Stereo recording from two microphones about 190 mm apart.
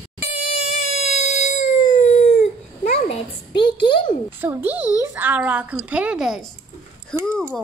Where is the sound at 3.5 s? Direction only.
25° left (ahead or behind).